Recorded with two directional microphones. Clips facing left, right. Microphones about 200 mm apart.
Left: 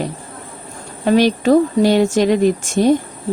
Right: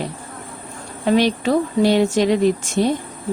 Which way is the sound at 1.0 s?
45° left (ahead or behind).